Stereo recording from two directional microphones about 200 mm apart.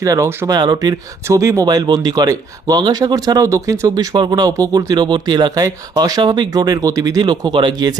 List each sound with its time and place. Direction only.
0.0 s speech: 15° right (ahead or behind)